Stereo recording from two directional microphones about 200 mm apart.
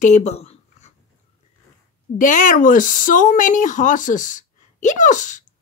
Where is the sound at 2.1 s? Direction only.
40° left (ahead or behind).